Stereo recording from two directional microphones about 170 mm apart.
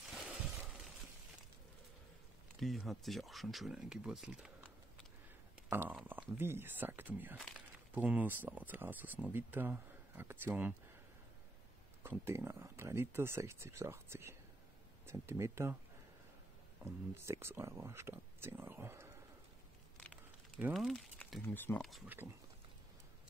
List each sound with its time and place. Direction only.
0.1 s a sound: centre (ahead or behind)
2.6 s speech: centre (ahead or behind)
5.7 s speech: 10° right (ahead or behind)
7.3 s speech: centre (ahead or behind)
12.0 s speech: 15° right (ahead or behind)
16.8 s speech: 15° right (ahead or behind)
20.7 s speech: 5° left (ahead or behind)
21.8 s speech: centre (ahead or behind)